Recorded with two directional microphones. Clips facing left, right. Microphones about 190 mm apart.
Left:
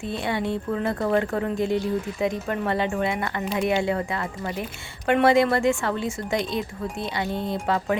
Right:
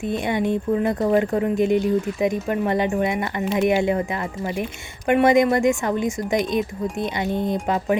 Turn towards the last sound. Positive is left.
turn(degrees=-20)  # may be behind; listen again after turning